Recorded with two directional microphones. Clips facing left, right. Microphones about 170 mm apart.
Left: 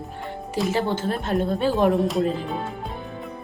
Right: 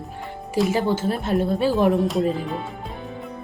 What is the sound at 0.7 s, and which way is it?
Speech, 10° right (ahead or behind).